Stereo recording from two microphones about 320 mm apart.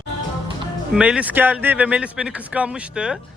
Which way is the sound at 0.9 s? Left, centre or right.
Centre.